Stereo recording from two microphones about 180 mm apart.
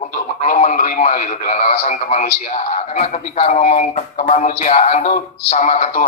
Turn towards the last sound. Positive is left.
turn(degrees=40)  # may be behind; listen again after turning